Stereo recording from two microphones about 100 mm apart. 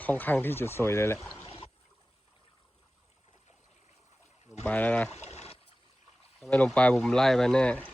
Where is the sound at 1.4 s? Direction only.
65° left (ahead or behind).